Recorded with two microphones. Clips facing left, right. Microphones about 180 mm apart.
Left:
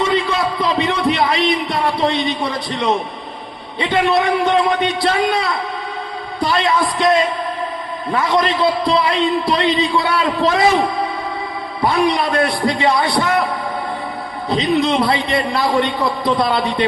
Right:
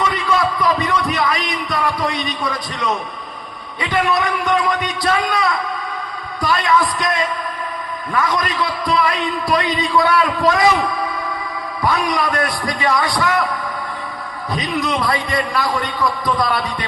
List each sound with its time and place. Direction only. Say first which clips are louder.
0.0 s a sound: left 1 dB; 25° left (ahead or behind)
3.8 s a man's voice: left 3 dB; 25° left (ahead or behind)
14.5 s a man's voice: left 5 dB; 25° left (ahead or behind)